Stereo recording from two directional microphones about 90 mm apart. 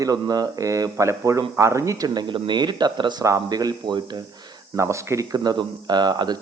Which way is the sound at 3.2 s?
40° right (ahead or behind).